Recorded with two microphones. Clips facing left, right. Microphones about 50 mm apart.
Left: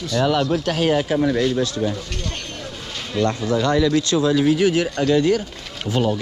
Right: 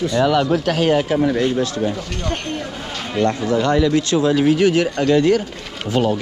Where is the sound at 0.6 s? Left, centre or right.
Right.